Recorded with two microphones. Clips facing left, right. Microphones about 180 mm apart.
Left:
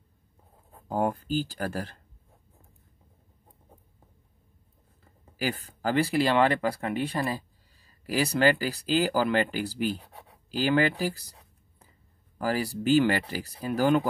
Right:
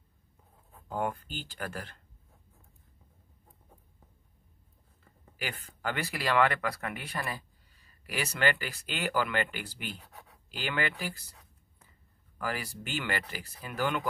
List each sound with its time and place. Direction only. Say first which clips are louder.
0.7 s speech: left 6 dB; 40° left (ahead or behind)
5.4 s speech: left 7 dB; 40° left (ahead or behind)